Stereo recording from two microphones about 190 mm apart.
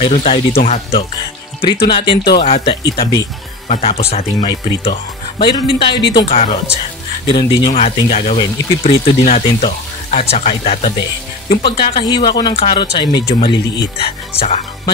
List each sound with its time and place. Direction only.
0.0 s speech: 30° left (ahead or behind)
1.9 s speech: 25° left (ahead or behind)
3.6 s speech: 35° left (ahead or behind)
6.2 s speech: 35° left (ahead or behind)
7.7 s speech: 40° left (ahead or behind)